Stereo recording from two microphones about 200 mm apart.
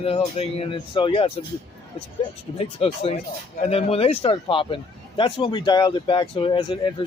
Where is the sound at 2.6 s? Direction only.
30° left (ahead or behind).